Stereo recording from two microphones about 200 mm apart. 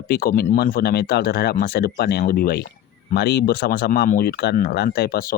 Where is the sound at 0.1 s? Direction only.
50° left (ahead or behind).